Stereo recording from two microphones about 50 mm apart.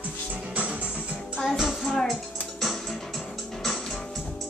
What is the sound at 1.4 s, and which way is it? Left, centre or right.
Music, centre.